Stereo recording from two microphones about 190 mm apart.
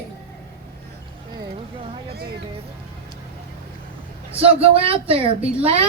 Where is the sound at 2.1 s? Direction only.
55° right (ahead or behind).